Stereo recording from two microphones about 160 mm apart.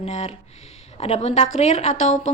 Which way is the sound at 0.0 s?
40° left (ahead or behind).